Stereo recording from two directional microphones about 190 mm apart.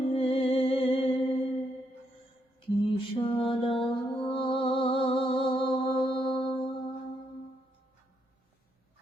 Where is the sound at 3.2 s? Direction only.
25° left (ahead or behind).